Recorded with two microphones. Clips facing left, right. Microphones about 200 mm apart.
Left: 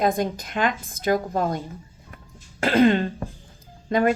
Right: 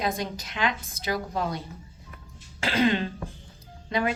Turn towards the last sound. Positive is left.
turn(degrees=50)  # may be behind; listen again after turning